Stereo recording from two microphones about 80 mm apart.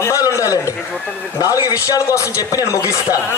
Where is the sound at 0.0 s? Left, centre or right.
Left.